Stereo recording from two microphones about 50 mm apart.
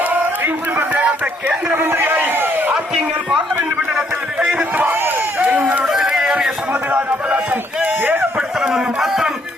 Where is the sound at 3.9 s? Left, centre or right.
Centre.